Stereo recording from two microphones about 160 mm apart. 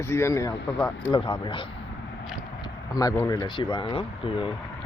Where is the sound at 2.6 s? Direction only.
20° left (ahead or behind).